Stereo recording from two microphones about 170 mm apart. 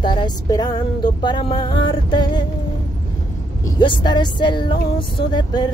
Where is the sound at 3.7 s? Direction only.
25° left (ahead or behind).